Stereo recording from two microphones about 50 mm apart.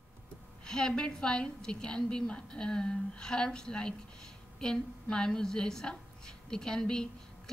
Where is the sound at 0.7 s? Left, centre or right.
Centre.